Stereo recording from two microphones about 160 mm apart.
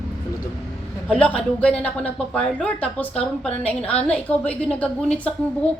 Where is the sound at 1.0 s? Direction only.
5° left (ahead or behind).